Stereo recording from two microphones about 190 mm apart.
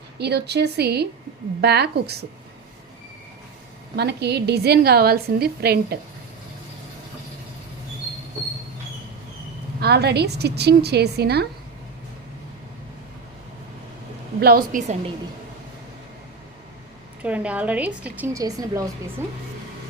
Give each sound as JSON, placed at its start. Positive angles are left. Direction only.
{"t": 0.2, "sound": "a woman's voice", "side_deg": -60}
{"t": 3.9, "sound": "a woman's voice", "side_deg": -60}
{"t": 9.8, "sound": "a woman's voice", "side_deg": -60}
{"t": 14.3, "sound": "a woman's voice", "side_deg": -55}
{"t": 17.2, "sound": "a woman's voice", "side_deg": -5}